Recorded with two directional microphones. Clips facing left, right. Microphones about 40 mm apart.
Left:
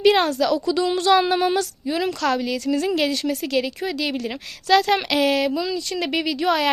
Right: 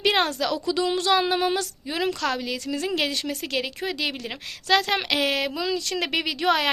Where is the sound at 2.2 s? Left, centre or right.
Centre.